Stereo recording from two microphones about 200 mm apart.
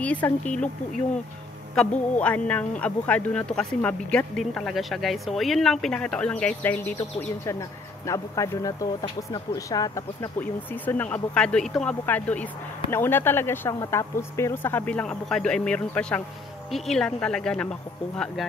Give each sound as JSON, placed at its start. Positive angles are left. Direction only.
{"t": 0.0, "sound": "speech", "side_deg": 5}
{"t": 2.1, "sound": "speech", "side_deg": 5}